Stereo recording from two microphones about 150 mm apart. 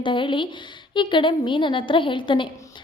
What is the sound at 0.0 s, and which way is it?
A woman's voice, 35° left (ahead or behind).